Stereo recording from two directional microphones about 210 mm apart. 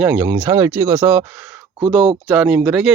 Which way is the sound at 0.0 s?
10° right (ahead or behind).